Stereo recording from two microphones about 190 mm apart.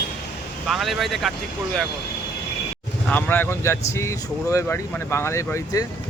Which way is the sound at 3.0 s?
10° left (ahead or behind).